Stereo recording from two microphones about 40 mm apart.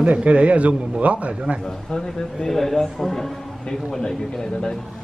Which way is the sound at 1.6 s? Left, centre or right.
Centre.